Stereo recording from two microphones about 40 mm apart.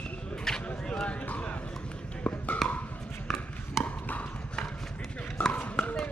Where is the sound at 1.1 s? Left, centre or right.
Left.